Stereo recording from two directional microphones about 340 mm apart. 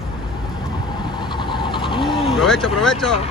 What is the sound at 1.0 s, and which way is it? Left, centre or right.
Vehicle, centre.